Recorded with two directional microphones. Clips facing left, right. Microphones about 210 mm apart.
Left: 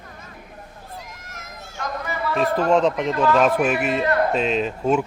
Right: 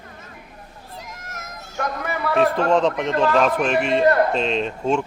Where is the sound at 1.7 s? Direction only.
60° right (ahead or behind).